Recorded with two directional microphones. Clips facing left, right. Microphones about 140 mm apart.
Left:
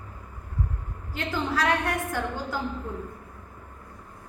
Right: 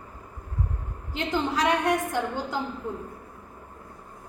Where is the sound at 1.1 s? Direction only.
20° right (ahead or behind).